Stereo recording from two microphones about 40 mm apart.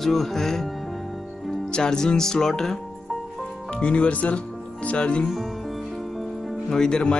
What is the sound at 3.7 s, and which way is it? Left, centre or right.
Speech, left.